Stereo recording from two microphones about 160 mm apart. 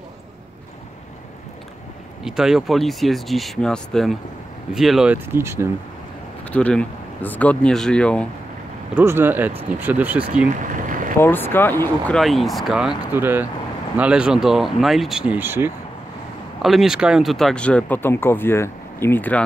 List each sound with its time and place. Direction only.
2.2 s speech: 5° right (ahead or behind)
6.4 s speech: 10° left (ahead or behind)
8.9 s speech: 15° right (ahead or behind)
10.5 s a sound: 55° right (ahead or behind)
11.1 s speech: 15° left (ahead or behind)
12.2 s speech: centre (ahead or behind)
16.6 s speech: centre (ahead or behind)